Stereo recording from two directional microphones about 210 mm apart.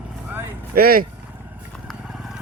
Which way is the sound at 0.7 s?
45° right (ahead or behind).